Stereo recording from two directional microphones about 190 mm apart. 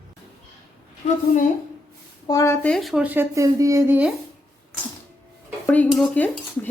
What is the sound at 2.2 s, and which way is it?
Speech, 15° left (ahead or behind).